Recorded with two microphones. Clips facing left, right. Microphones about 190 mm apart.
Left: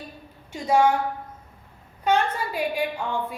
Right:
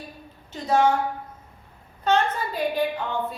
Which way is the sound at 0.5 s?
10° left (ahead or behind).